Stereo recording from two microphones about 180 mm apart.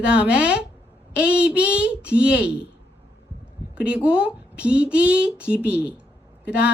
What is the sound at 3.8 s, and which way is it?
A woman's voice, 5° right (ahead or behind).